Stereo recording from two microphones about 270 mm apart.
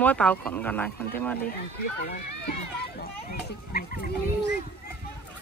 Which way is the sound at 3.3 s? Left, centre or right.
Left.